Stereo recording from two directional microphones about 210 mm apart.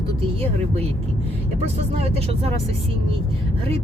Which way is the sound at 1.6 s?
30° right (ahead or behind).